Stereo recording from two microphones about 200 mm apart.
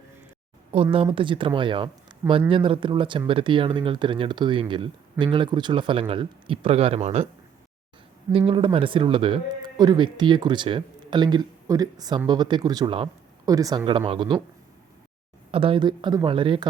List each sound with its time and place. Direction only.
0.7 s speech: 30° right (ahead or behind)
8.3 s speech: 30° right (ahead or behind)
15.5 s speech: 25° right (ahead or behind)